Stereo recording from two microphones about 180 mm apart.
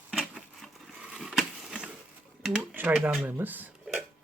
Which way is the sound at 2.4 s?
10° right (ahead or behind).